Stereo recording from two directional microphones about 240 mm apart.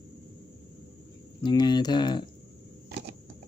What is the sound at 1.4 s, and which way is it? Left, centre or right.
Speech, centre.